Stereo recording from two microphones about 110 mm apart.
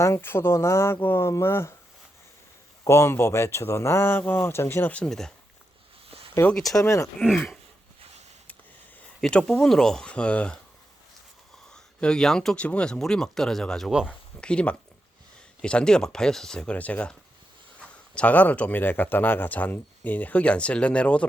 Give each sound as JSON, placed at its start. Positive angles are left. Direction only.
{"t": 0.0, "sound": "speech", "side_deg": 25}
{"t": 2.8, "sound": "speech", "side_deg": 25}
{"t": 6.5, "sound": "speech", "side_deg": 0}
{"t": 6.7, "sound": "speech", "side_deg": 25}
{"t": 7.3, "sound": "speech", "side_deg": 5}
{"t": 9.2, "sound": "speech", "side_deg": 5}
{"t": 11.7, "sound": "speech", "side_deg": 5}